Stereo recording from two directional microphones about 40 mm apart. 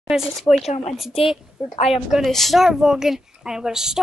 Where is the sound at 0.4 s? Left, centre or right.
Centre.